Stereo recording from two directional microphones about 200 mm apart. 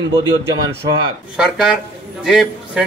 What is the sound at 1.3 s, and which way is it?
A man's voice, centre (ahead or behind).